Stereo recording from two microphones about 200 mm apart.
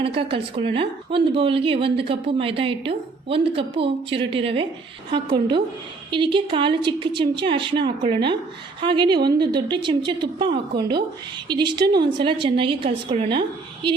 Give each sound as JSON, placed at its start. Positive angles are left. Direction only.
{"t": 0.0, "sound": "a woman's voice", "side_deg": -25}
{"t": 6.1, "sound": "a woman's voice", "side_deg": -25}